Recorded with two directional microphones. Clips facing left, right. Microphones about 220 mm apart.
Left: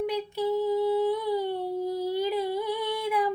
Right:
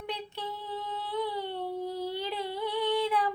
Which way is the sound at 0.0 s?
10° left (ahead or behind).